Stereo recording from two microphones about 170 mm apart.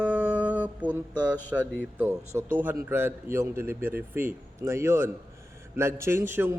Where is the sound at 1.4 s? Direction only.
10° left (ahead or behind).